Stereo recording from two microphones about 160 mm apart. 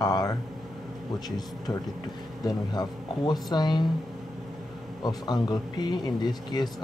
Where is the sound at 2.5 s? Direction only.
25° left (ahead or behind).